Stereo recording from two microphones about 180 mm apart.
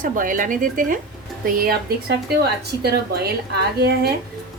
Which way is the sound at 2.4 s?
65° right (ahead or behind).